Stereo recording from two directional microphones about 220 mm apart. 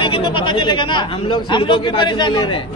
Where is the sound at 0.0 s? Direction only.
25° left (ahead or behind).